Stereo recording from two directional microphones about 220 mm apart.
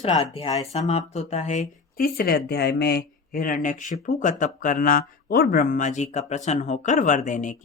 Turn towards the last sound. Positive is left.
turn(degrees=35)  # may be behind; listen again after turning